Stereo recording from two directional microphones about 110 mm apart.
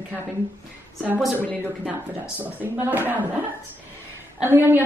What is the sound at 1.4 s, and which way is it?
Speech, 15° left (ahead or behind).